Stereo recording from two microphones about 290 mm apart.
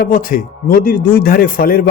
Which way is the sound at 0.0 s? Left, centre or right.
Left.